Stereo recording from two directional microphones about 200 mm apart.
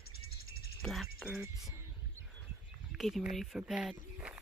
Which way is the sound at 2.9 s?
Centre (ahead or behind).